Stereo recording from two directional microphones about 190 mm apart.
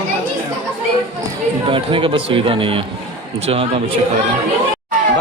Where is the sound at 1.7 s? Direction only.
25° right (ahead or behind).